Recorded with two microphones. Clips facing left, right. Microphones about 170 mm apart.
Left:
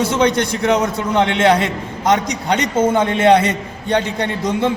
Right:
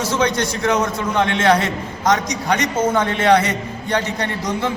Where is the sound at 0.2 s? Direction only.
15° left (ahead or behind).